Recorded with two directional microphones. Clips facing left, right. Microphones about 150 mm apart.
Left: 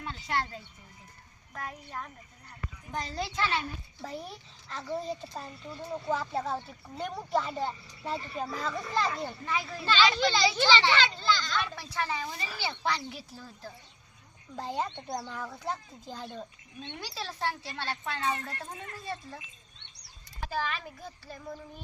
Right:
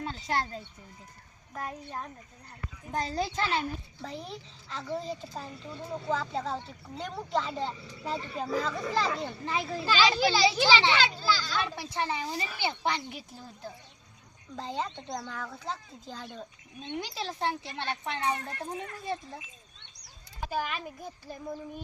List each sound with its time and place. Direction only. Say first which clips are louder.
0.0 s speech: right 2 dB; 35° right (ahead or behind)
1.5 s speech: right 2 dB; 25° right (ahead or behind)
2.9 s a child's voice: right 4 dB; 35° right (ahead or behind)
4.0 s speech: left 2 dB; 5° left (ahead or behind)
9.5 s speech: right 3 dB; 30° right (ahead or behind)
9.8 s speech: even; 10° right (ahead or behind)
11.7 s speech: right 2 dB; 20° right (ahead or behind)
14.5 s speech: left 1 dB; 10° left (ahead or behind)
17.0 s speech: right 2 dB; 20° right (ahead or behind)
20.4 s speech: right 1 dB; 15° right (ahead or behind)